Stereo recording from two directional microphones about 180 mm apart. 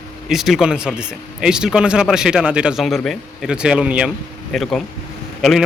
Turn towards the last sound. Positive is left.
turn(degrees=0)  # may be behind; listen again after turning